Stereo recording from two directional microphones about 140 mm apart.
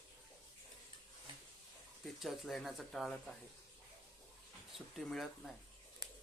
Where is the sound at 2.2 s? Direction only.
Centre (ahead or behind).